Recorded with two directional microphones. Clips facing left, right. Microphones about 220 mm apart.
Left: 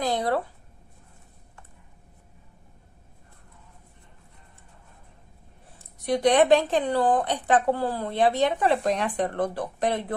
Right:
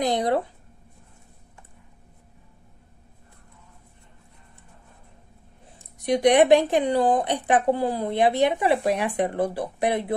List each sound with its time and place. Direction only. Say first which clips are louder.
0.0 s speech: right 3 dB; 15° right (ahead or behind)
5.8 s speech: right 3 dB; 15° right (ahead or behind)